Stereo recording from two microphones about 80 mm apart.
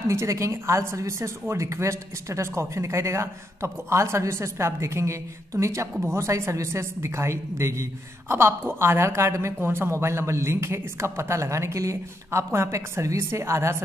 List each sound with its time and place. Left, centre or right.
0.1 s a woman's voice: right